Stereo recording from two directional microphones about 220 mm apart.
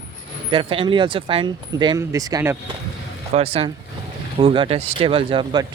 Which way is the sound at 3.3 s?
25° right (ahead or behind).